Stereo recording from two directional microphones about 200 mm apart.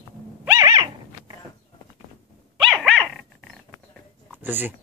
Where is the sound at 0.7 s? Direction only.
20° right (ahead or behind).